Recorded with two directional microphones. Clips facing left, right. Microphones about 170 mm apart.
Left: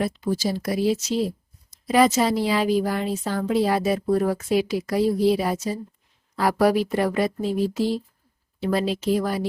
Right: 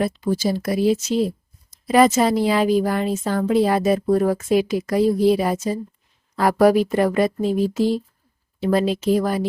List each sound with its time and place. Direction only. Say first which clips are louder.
0.0 s a woman's voice: right 3 dB; 50° right (ahead or behind)